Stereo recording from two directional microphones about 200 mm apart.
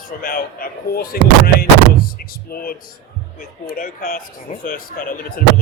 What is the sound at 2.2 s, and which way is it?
A man's voice, 45° left (ahead or behind).